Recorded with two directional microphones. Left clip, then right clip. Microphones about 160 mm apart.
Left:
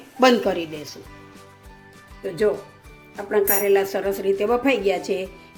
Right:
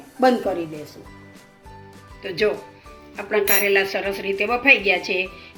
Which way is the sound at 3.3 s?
25° left (ahead or behind).